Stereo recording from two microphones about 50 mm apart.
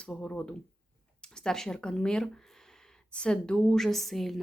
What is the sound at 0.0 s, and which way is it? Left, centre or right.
A woman's voice, left.